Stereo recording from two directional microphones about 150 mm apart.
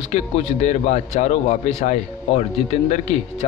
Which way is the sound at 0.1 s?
50° left (ahead or behind).